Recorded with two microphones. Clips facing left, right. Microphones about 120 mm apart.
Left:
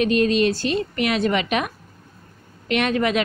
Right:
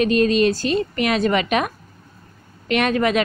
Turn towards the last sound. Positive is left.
turn(degrees=-45)  # may be behind; listen again after turning